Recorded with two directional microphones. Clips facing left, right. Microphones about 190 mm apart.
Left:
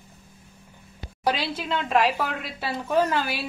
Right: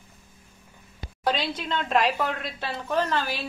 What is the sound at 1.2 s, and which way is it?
A woman's voice, 10° left (ahead or behind).